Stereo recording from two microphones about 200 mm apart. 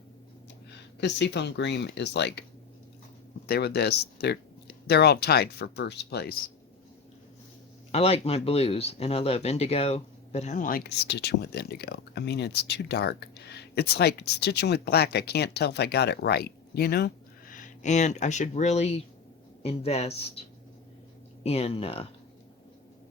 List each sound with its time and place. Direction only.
0.9 s speech: 60° left (ahead or behind)
3.4 s speech: 55° left (ahead or behind)
7.9 s speech: 30° left (ahead or behind); by 17.1 s 50° left (ahead or behind)
17.5 s speech: 40° left (ahead or behind)
21.4 s speech: 30° left (ahead or behind)